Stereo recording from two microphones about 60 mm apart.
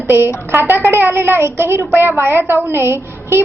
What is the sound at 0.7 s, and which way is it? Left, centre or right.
A woman's voice, right.